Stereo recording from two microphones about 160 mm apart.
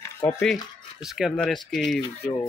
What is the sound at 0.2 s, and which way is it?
Speech, 15° left (ahead or behind).